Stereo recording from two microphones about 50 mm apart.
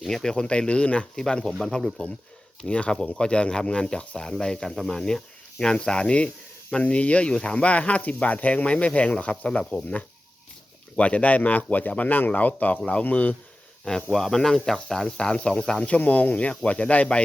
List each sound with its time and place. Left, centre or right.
0.1 s speech: centre
0.4 s speech: left
2.6 s speech: left
10.9 s speech: left
13.8 s speech: centre
15.3 s speech: left
15.9 s speech: left